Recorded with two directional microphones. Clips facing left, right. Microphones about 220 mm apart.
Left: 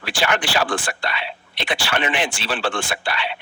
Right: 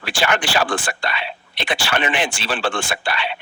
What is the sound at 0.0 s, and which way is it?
Speech, 45° right (ahead or behind).